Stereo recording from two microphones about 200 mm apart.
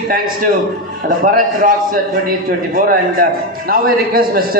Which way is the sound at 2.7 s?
45° right (ahead or behind).